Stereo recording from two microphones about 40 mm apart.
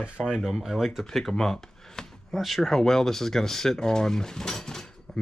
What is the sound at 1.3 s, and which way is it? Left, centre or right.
Speech, centre.